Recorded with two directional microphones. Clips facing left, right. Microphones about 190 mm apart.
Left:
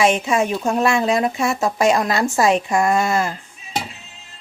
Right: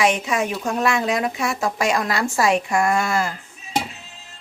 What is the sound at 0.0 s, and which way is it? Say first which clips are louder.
Speech: left 3 dB; 25° left (ahead or behind).